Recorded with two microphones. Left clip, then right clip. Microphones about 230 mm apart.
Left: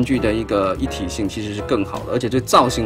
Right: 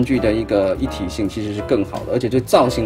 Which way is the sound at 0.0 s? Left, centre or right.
Centre.